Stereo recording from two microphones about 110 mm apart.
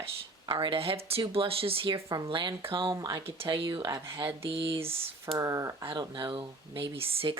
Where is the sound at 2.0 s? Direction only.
35° right (ahead or behind); by 2.9 s 50° right (ahead or behind).